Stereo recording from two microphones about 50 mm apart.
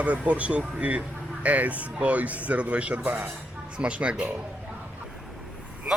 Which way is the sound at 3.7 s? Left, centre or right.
Right.